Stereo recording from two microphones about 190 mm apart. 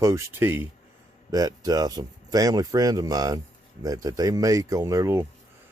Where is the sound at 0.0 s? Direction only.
15° right (ahead or behind).